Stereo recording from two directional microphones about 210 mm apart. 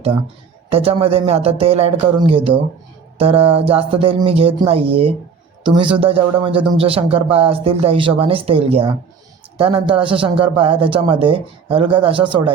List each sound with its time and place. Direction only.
0.7 s speech: 25° right (ahead or behind)